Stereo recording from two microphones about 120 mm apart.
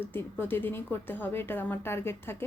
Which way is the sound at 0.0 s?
15° left (ahead or behind).